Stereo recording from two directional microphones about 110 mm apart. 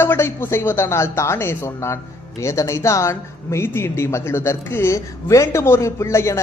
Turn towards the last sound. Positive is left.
turn(degrees=25)  # may be behind; listen again after turning